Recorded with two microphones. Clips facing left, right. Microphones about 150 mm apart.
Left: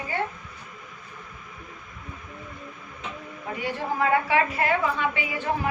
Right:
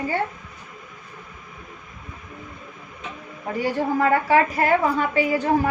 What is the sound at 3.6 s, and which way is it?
A woman's voice, 40° right (ahead or behind).